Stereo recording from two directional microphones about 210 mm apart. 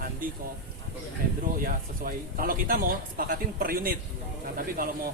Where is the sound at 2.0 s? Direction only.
40° right (ahead or behind).